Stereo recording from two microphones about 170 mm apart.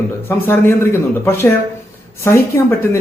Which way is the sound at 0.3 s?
15° left (ahead or behind).